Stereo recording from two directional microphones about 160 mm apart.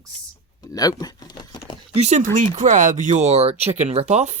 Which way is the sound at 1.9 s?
45° right (ahead or behind).